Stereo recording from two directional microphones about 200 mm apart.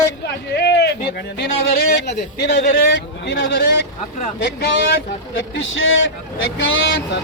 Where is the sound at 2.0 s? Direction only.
55° left (ahead or behind).